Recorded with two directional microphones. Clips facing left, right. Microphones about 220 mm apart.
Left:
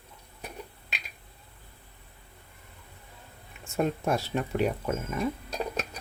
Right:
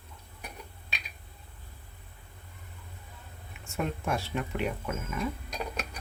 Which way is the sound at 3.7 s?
35° left (ahead or behind).